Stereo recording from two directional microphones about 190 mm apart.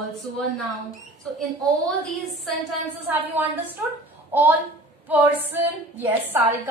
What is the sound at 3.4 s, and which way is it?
A woman's voice, 10° right (ahead or behind).